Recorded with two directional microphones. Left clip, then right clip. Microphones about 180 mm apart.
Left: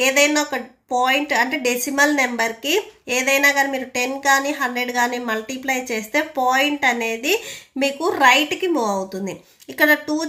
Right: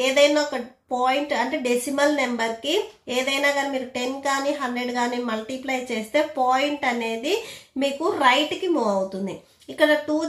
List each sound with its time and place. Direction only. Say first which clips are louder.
0.0 s a woman's voice: left 1 dB; 30° left (ahead or behind)